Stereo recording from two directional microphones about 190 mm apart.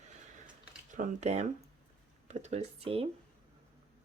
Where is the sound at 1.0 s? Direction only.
35° right (ahead or behind).